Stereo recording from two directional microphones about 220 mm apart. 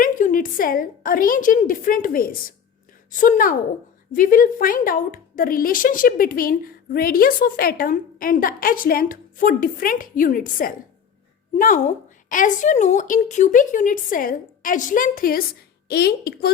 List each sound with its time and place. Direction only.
0.0 s a woman's voice: 35° left (ahead or behind)